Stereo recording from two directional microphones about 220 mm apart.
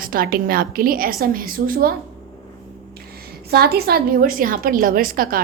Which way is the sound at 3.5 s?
45° right (ahead or behind).